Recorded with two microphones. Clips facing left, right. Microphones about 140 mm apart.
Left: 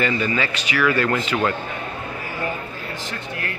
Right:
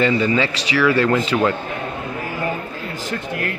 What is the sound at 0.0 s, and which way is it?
Speech, 25° right (ahead or behind).